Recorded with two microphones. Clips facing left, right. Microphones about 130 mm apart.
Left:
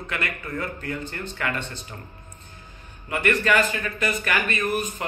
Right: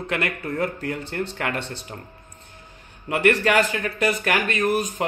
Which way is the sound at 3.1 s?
75° right (ahead or behind).